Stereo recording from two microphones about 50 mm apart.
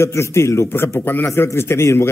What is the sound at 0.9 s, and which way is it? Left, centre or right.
Speech, left.